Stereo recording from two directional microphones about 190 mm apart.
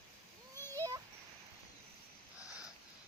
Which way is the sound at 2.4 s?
5° right (ahead or behind).